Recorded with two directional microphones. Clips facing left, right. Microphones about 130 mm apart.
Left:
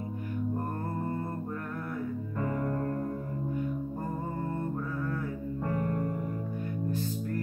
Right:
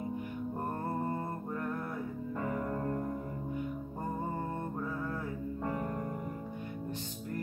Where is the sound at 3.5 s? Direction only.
15° right (ahead or behind).